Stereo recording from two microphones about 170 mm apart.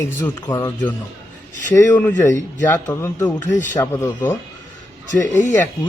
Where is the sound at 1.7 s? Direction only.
15° left (ahead or behind).